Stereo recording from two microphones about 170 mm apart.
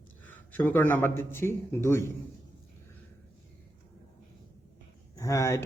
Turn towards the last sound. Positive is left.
turn(degrees=15)  # may be behind; listen again after turning